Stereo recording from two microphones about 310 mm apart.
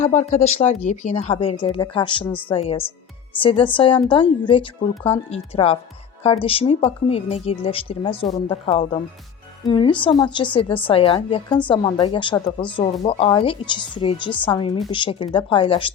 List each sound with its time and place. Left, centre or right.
0.0 s a woman's voice: left